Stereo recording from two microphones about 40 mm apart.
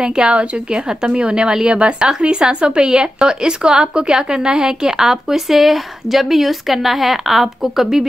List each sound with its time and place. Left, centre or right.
0.0 s a woman's voice: right